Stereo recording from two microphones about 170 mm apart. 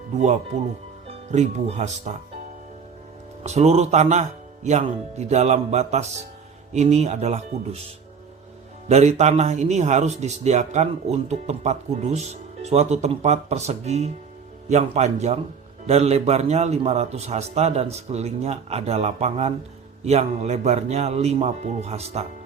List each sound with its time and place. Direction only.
0.1 s speech: 45° right (ahead or behind)
3.4 s a man's voice: 40° right (ahead or behind)
8.9 s a man's voice: 40° right (ahead or behind)